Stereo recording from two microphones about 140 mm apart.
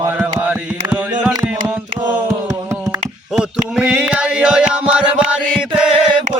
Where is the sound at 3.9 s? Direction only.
10° right (ahead or behind).